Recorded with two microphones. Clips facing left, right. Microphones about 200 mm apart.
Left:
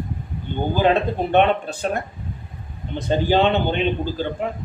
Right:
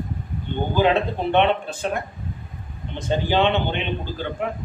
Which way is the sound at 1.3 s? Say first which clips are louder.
Left 2 dB; 45° left (ahead or behind).